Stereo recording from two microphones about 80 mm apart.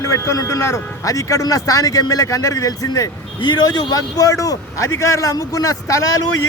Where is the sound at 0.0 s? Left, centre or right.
Left.